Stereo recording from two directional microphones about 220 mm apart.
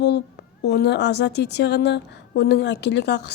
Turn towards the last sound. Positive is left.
turn(degrees=50)  # may be behind; listen again after turning